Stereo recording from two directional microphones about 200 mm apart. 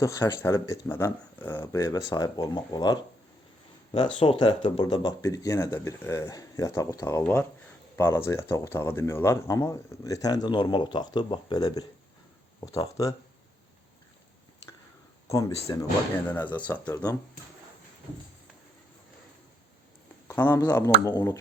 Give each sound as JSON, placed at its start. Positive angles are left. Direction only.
{"t": 0.0, "sound": "speech", "side_deg": 15}
{"t": 15.3, "sound": "speech", "side_deg": 15}
{"t": 20.2, "sound": "speech", "side_deg": 10}